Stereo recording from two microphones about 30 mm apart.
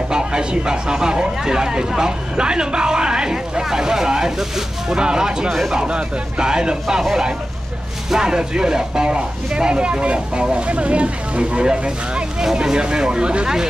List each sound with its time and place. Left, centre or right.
0.1 s speech: right
4.9 s speech: right
7.0 s speech: centre
8.2 s speech: right